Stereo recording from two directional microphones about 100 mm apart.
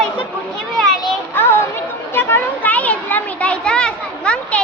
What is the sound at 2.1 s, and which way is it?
Children playing, 20° left (ahead or behind).